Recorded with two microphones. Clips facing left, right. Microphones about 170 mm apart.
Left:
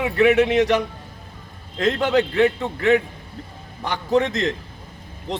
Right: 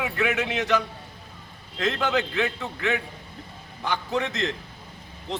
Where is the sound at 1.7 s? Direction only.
35° left (ahead or behind).